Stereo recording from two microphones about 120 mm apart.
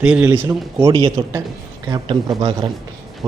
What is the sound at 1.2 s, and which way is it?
Speech, 50° right (ahead or behind).